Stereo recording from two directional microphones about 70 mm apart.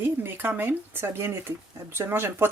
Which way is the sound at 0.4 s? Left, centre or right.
Right.